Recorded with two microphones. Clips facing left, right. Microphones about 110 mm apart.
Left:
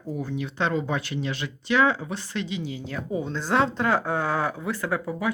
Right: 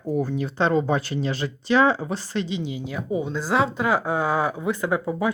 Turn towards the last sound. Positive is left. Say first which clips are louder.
# right 3 dB
turn(degrees=-25)  # may be behind; listen again after turning